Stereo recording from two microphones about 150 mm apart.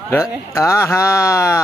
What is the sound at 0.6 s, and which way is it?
Speech, 20° left (ahead or behind).